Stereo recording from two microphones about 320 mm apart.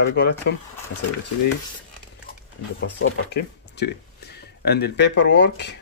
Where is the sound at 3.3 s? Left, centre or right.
Left.